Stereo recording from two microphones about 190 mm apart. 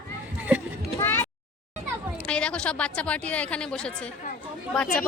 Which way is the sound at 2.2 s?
5° left (ahead or behind).